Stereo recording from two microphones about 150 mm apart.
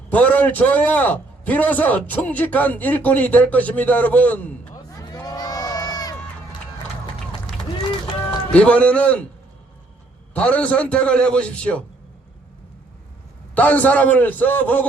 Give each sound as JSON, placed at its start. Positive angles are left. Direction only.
{"t": 0.1, "sound": "a man's voice", "side_deg": 10}
{"t": 4.9, "sound": "crowd", "side_deg": 25}
{"t": 8.5, "sound": "a man's voice", "side_deg": 10}
{"t": 10.3, "sound": "a man's voice", "side_deg": 10}
{"t": 13.5, "sound": "a man's voice", "side_deg": 10}